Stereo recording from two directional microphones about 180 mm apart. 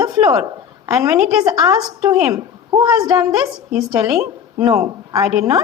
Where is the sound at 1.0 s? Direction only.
5° right (ahead or behind).